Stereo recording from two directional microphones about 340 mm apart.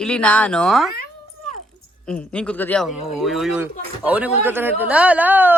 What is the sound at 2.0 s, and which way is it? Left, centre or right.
Speech, centre.